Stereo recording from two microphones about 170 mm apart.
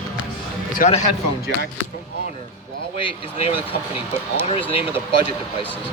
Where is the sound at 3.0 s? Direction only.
35° left (ahead or behind).